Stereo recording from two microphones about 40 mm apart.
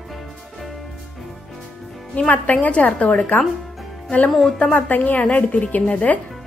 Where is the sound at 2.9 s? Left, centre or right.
Left.